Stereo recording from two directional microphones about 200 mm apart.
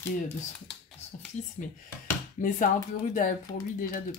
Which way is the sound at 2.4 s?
40° left (ahead or behind).